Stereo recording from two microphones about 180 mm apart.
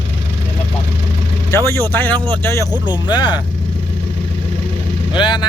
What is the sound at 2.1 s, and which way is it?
Speech, 25° right (ahead or behind).